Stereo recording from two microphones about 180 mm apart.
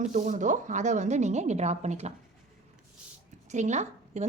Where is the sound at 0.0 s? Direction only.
45° right (ahead or behind).